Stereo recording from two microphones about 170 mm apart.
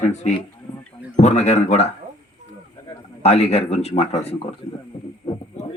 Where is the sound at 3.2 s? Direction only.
35° left (ahead or behind).